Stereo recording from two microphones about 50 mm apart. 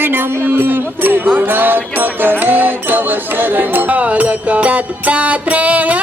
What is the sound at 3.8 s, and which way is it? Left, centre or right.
Music, right.